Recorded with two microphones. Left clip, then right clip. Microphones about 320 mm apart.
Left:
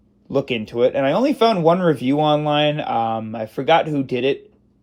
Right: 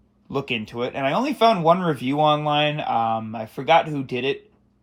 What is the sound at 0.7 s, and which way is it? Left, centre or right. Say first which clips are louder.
Speech: left 8 dB; centre.